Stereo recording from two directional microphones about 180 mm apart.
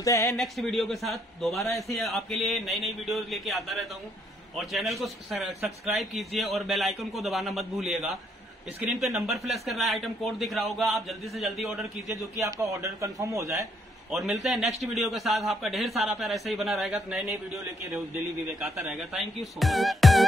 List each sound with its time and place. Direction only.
0.0 s speech: 20° left (ahead or behind)
0.4 s a man's voice: centre (ahead or behind)
9.2 s a man's voice: centre (ahead or behind)
12.1 s a man's voice: 20° right (ahead or behind)
14.1 s a man's voice: centre (ahead or behind)